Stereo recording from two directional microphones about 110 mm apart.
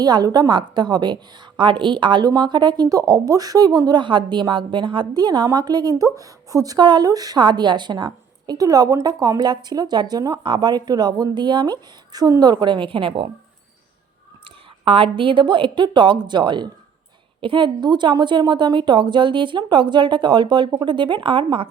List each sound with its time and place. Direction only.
0.0 s a woman's voice: 35° right (ahead or behind)
14.8 s a woman's voice: 55° right (ahead or behind)